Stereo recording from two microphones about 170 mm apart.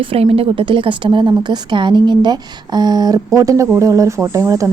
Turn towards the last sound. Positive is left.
turn(degrees=-20)  # may be behind; listen again after turning